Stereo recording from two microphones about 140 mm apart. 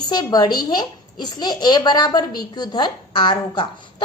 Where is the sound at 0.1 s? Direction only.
30° left (ahead or behind).